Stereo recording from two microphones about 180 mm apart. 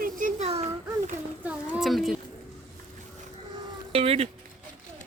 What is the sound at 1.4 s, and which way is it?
Speech, 5° right (ahead or behind).